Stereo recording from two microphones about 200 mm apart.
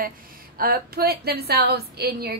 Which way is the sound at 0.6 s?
50° right (ahead or behind).